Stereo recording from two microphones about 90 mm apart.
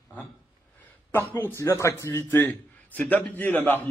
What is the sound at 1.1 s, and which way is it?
A man's voice, 25° left (ahead or behind).